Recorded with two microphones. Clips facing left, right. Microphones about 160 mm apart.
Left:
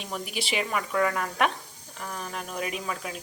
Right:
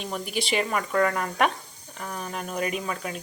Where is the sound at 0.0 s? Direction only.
Centre (ahead or behind).